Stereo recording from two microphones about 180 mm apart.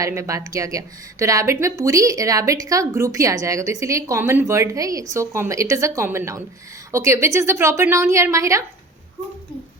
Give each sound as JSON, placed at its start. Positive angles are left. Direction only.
{"t": 0.0, "sound": "speech", "side_deg": -15}